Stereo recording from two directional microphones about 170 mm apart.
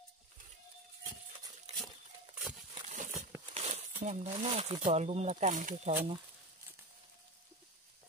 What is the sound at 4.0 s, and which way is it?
Speech, 40° right (ahead or behind).